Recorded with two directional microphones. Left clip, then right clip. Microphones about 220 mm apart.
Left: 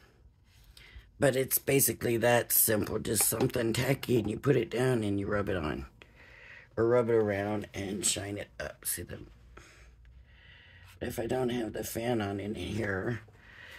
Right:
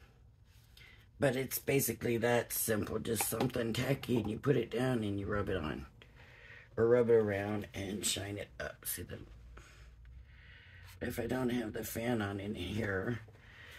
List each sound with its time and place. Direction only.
0.7 s speech: 45° left (ahead or behind)
11.0 s speech: 35° left (ahead or behind)